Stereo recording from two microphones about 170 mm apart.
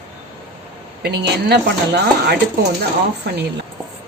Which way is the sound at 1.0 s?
75° right (ahead or behind).